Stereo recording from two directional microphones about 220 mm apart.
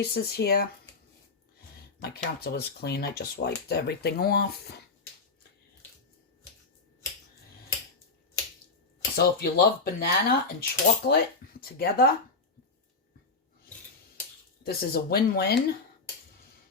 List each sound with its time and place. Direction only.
0.0 s speech: 45° left (ahead or behind)
2.0 s speech: 45° left (ahead or behind)
9.1 s speech: 45° left (ahead or behind)
14.6 s speech: 45° left (ahead or behind)